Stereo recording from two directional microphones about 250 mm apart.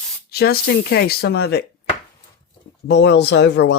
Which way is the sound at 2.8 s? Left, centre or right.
Left.